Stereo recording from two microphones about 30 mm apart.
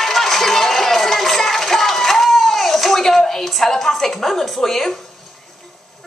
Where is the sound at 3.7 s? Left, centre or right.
Centre.